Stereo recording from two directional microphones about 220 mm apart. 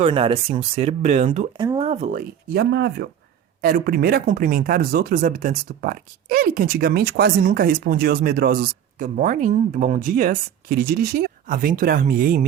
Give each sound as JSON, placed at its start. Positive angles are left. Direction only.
{"t": 0.0, "sound": "speech", "side_deg": -25}
{"t": 1.6, "sound": "a sound", "side_deg": -15}
{"t": 1.9, "sound": "speech", "side_deg": -35}